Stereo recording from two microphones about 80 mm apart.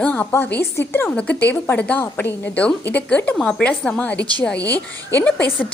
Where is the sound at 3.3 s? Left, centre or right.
Centre.